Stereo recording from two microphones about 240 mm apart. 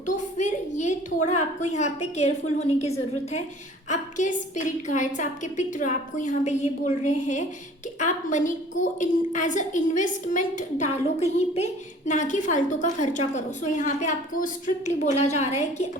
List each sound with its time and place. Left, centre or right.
0.2 s a woman's voice: left
3.8 s a woman's voice: left